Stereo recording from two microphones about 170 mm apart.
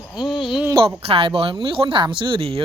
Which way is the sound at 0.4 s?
Centre (ahead or behind).